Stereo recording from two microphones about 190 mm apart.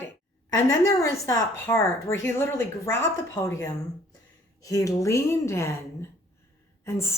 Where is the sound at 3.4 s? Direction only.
15° left (ahead or behind).